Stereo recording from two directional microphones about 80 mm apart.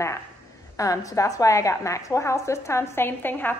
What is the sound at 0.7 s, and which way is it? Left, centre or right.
A woman's voice, left.